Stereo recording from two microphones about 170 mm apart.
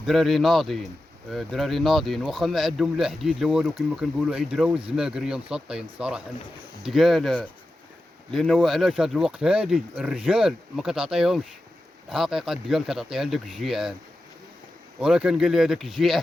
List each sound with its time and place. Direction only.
0.0 s speech: centre (ahead or behind)
15.0 s speech: 5° right (ahead or behind)